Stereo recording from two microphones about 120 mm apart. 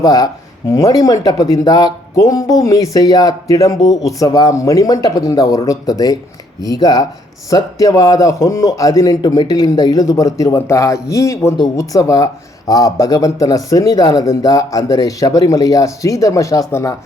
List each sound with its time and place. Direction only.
0.0 s speech: 30° left (ahead or behind)